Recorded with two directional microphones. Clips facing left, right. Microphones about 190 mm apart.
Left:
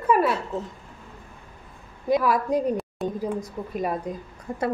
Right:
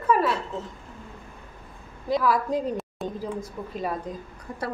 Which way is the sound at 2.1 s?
15° left (ahead or behind).